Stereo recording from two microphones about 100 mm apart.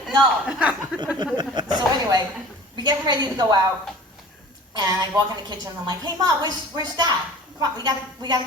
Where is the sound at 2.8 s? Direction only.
45° right (ahead or behind).